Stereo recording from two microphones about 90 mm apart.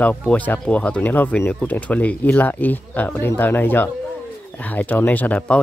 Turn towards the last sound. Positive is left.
turn(degrees=15)  # may be behind; listen again after turning